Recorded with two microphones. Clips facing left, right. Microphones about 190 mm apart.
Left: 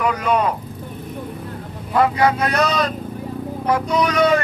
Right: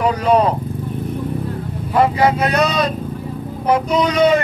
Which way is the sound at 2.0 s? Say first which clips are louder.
Right 2 dB; 25° right (ahead or behind).